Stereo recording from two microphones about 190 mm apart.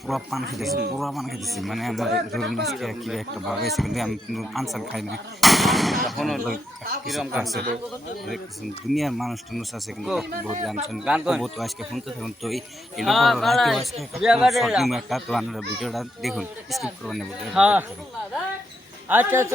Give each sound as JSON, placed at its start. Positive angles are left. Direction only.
{"t": 0.1, "sound": "speech", "side_deg": 0}
{"t": 6.5, "sound": "speech", "side_deg": -50}
{"t": 7.0, "sound": "speech", "side_deg": 0}
{"t": 8.9, "sound": "speech", "side_deg": 0}
{"t": 19.0, "sound": "a man's voice", "side_deg": -10}